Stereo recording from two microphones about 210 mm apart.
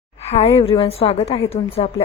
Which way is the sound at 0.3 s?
30° left (ahead or behind).